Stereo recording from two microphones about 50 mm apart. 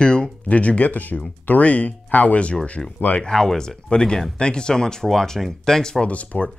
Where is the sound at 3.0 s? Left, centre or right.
Left.